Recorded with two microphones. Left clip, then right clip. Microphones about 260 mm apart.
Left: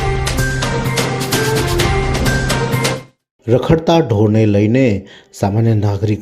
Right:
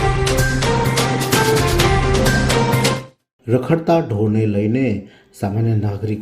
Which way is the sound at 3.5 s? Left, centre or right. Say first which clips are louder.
Left 4 dB; left.